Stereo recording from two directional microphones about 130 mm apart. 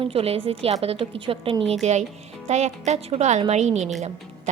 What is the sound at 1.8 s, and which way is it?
A woman's voice, 60° right (ahead or behind).